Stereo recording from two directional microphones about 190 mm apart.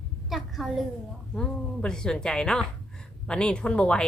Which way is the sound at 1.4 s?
5° left (ahead or behind).